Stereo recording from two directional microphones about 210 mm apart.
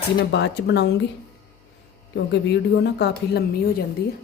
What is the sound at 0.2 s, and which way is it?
Speech, 55° left (ahead or behind).